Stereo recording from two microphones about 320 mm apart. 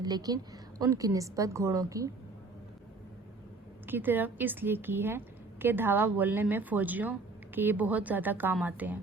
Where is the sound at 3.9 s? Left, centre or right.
Centre.